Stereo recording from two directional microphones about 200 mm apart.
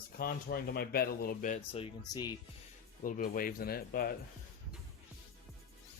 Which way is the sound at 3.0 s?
45° left (ahead or behind).